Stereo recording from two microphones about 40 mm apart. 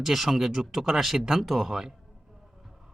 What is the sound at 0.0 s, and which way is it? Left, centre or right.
Speech, centre.